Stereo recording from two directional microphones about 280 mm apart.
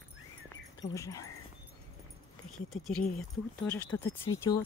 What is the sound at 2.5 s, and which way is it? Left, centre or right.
A woman's voice, centre.